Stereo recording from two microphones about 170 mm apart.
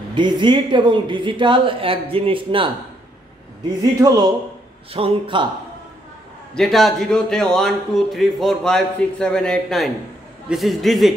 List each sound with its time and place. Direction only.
0.1 s a woman's voice: 25° right (ahead or behind)
4.0 s a woman's voice: 25° right (ahead or behind)
6.5 s a man's voice: centre (ahead or behind)